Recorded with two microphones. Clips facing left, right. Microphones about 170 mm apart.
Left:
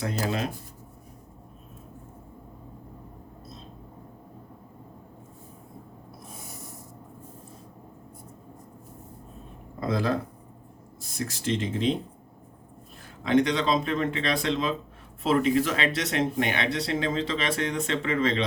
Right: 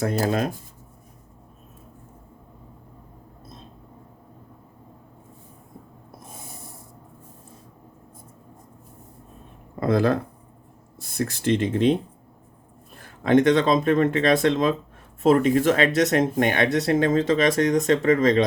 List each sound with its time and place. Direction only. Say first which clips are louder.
0.0 s speech: right 6 dB; 45° right (ahead or behind)
9.8 s speech: right 6 dB; 60° right (ahead or behind)
11.2 s speech: right 6 dB; 60° right (ahead or behind)
13.2 s speech: right 6 dB; 50° right (ahead or behind)